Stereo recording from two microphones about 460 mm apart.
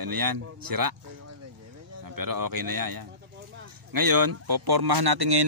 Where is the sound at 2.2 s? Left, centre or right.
Right.